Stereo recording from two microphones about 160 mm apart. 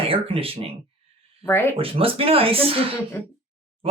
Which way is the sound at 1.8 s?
35° right (ahead or behind).